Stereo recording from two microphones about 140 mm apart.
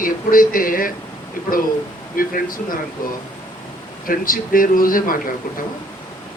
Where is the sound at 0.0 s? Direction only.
80° left.